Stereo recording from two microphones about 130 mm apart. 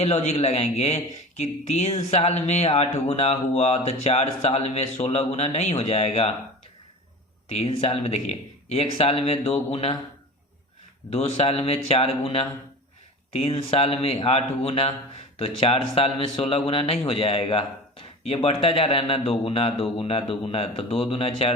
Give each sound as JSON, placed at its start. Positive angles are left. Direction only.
{"t": 0.0, "sound": "a man's voice", "side_deg": 55}
{"t": 7.5, "sound": "speech", "side_deg": 50}
{"t": 11.1, "sound": "speech", "side_deg": 50}